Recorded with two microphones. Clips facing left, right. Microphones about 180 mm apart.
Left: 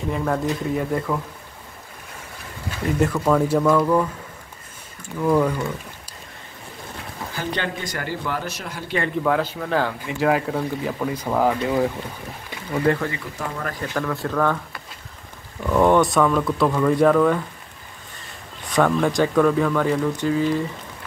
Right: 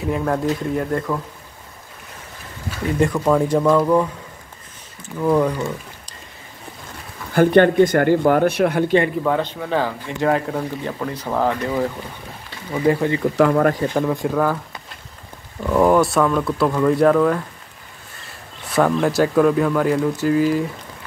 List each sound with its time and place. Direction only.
0.0 s speech: centre (ahead or behind)
3.1 s speech: 10° right (ahead or behind)
5.2 s speech: 5° right (ahead or behind)
7.3 s speech: 55° right (ahead or behind)
9.0 s speech: 5° right (ahead or behind)
12.7 s speech: 10° right (ahead or behind)
13.4 s speech: 70° right (ahead or behind)
13.9 s speech: 15° right (ahead or behind)
15.6 s speech: 5° right (ahead or behind)
18.8 s speech: 5° right (ahead or behind)